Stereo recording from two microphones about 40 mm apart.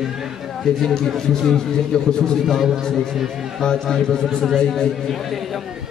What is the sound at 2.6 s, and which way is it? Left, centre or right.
Speech, centre.